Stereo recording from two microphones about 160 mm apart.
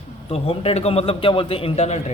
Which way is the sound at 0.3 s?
40° left (ahead or behind).